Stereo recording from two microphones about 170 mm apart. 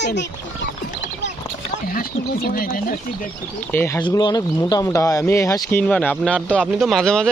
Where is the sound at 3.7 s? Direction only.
10° left (ahead or behind).